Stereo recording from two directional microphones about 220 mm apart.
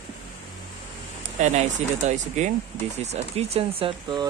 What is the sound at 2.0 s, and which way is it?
Speech, 30° right (ahead or behind).